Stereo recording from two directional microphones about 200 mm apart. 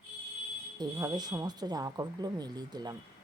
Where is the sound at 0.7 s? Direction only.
20° right (ahead or behind).